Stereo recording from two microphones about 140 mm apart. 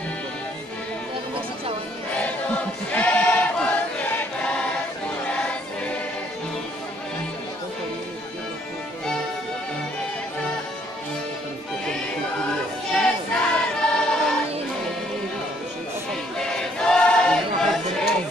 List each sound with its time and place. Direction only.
2.1 s choir: 10° left (ahead or behind)
12.9 s choir: 5° left (ahead or behind)
16.3 s choir: 5° left (ahead or behind)